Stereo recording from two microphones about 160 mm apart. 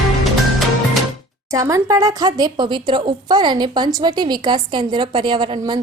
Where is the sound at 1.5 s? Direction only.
20° right (ahead or behind).